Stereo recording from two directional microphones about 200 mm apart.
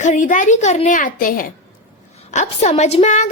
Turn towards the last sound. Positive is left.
turn(degrees=35)  # may be behind; listen again after turning